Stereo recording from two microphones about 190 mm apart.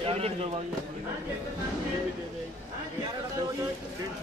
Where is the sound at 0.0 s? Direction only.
30° right (ahead or behind).